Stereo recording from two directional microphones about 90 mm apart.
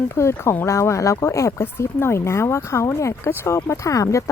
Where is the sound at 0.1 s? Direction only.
30° left (ahead or behind).